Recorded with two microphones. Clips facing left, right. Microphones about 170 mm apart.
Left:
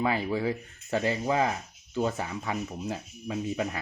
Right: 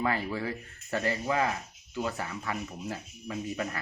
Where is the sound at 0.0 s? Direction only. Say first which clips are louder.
Left 3 dB; 15° left (ahead or behind).